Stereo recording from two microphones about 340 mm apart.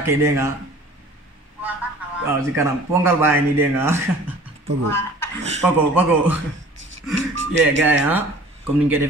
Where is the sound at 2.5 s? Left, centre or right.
Centre.